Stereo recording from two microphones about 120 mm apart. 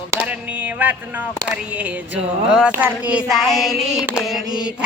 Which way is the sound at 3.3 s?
Centre (ahead or behind).